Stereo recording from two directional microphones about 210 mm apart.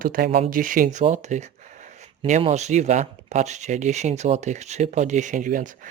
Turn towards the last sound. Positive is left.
turn(degrees=-40)  # may be behind; listen again after turning